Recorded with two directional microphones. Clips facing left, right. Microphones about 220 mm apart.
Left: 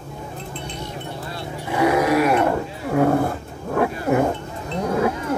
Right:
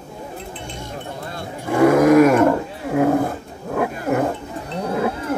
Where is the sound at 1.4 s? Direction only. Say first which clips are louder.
Right 5 dB; 50° right (ahead or behind).